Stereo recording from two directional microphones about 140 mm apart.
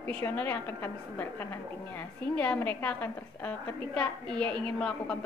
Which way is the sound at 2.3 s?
10° left (ahead or behind).